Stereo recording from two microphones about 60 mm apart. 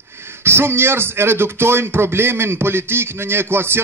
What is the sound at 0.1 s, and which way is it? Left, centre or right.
Speech, right.